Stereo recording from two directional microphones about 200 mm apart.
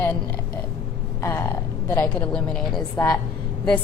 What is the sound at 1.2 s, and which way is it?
A woman's voice, 10° left (ahead or behind).